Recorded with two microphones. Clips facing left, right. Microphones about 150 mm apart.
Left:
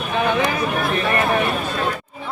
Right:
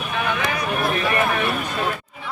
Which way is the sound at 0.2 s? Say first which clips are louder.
Left 5 dB; 30° left (ahead or behind).